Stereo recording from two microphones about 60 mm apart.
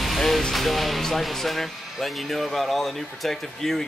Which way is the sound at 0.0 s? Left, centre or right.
Centre.